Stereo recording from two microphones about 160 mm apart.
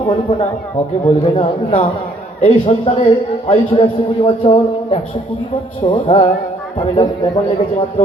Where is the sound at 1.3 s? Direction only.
45° left (ahead or behind); by 7.3 s 25° left (ahead or behind).